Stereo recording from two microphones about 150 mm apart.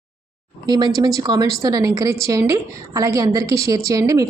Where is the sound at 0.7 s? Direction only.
30° right (ahead or behind).